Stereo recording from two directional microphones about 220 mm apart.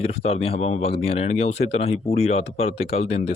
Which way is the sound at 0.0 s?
25° left (ahead or behind).